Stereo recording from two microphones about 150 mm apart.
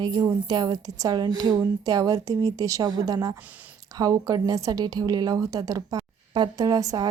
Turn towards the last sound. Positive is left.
turn(degrees=-25)  # may be behind; listen again after turning